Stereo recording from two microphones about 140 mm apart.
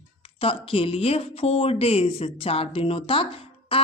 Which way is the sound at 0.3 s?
40° left (ahead or behind).